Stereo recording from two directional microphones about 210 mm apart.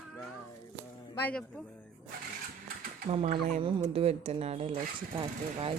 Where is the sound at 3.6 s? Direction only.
25° right (ahead or behind).